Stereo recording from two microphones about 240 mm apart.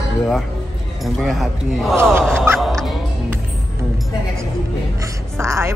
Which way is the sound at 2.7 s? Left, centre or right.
Centre.